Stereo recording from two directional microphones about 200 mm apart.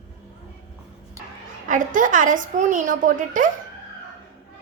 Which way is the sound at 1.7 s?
40° right (ahead or behind).